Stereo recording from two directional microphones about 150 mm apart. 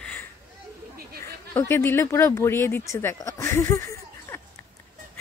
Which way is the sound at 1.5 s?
15° left (ahead or behind).